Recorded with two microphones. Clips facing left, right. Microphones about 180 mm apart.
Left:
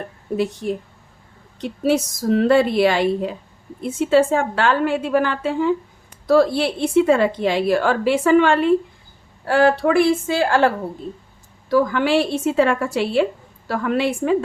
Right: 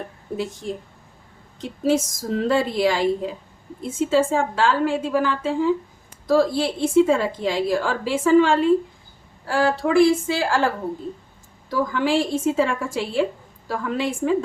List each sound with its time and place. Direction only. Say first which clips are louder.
1.6 s a woman's voice: left 2 dB; 65° left (ahead or behind)
11.7 s a woman's voice: left 4 dB; 70° left (ahead or behind)